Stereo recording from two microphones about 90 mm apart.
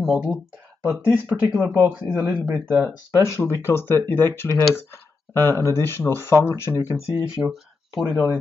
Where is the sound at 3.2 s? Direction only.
30° left (ahead or behind).